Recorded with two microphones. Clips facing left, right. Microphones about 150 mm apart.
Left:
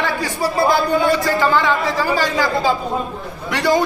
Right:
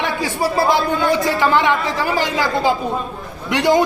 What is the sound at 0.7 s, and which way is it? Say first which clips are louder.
A man's voice: left 1 dB; 20° right (ahead or behind).